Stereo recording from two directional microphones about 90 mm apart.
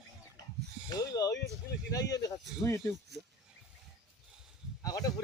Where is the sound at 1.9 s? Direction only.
40° left (ahead or behind).